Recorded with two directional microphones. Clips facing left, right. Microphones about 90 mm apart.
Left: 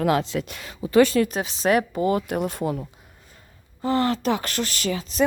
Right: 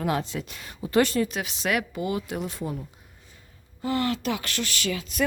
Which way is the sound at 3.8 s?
35° left (ahead or behind).